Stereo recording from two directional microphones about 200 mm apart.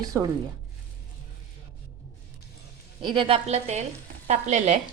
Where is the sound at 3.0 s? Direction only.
20° right (ahead or behind).